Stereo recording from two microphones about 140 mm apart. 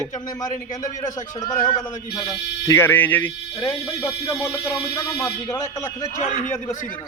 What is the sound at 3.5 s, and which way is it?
Speech, 25° left (ahead or behind).